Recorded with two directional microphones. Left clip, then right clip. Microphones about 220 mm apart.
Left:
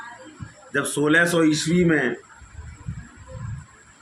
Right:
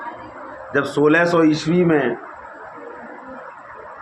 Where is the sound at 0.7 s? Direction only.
15° left (ahead or behind).